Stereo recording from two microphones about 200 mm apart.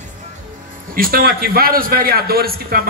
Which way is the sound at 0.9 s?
45° right (ahead or behind).